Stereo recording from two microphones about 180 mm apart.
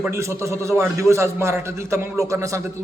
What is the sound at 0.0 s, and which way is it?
A man's voice, 15° right (ahead or behind).